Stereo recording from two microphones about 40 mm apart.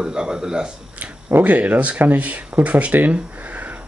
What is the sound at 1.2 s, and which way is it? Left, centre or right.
Speech, right.